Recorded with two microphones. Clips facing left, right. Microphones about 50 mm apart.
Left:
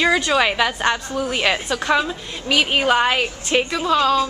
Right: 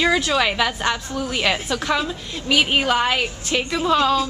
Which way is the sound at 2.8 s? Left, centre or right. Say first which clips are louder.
Left 2 dB; centre.